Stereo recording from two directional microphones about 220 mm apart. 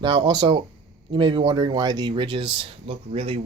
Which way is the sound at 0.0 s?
20° right (ahead or behind).